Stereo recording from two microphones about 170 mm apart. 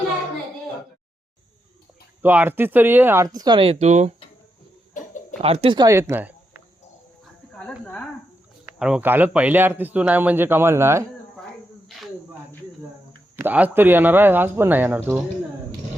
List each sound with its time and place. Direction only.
2.2 s a man's voice: 10° right (ahead or behind); by 4.1 s 40° right (ahead or behind)
5.4 s speech: 35° right (ahead or behind); by 6.6 s 10° right (ahead or behind)
7.5 s speech: 5° left (ahead or behind)
8.8 s a man's voice: 10° right (ahead or behind)
13.3 s a man's voice: 10° right (ahead or behind)